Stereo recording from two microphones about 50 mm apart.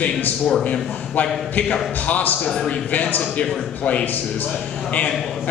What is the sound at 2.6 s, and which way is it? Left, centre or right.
A man's voice, left.